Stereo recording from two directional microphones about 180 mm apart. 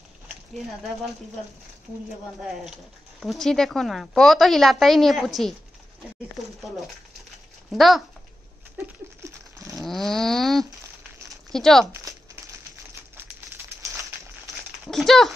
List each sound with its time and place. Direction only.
0.6 s speech: centre (ahead or behind)
2.4 s speech: centre (ahead or behind)
7.7 s speech: centre (ahead or behind)
8.7 s a sound: 15° right (ahead or behind)
9.8 s speech: centre (ahead or behind)
11.8 s speech: 15° right (ahead or behind)
14.9 s speech: centre (ahead or behind)